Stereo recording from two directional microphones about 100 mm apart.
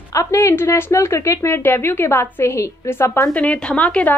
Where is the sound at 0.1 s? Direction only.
30° left (ahead or behind).